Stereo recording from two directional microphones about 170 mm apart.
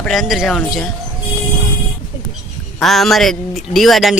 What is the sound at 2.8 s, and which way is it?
Speech, centre (ahead or behind).